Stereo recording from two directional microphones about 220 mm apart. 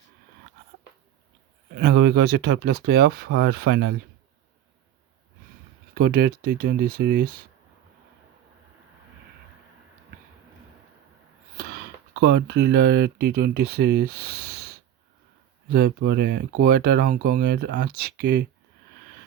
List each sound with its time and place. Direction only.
1.7 s speech: 45° right (ahead or behind)
5.9 s speech: 45° right (ahead or behind)
12.2 s speech: 45° right (ahead or behind)